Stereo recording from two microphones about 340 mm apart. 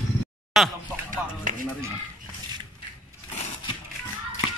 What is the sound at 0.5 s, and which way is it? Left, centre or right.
Speech, centre.